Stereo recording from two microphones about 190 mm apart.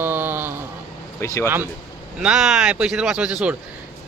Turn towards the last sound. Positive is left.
turn(degrees=-5)  # may be behind; listen again after turning